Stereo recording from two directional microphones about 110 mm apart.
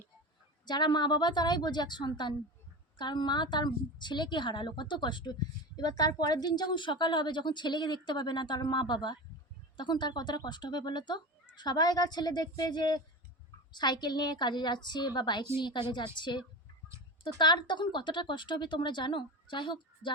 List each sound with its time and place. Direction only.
0.6 s a woman's voice: 40° left (ahead or behind)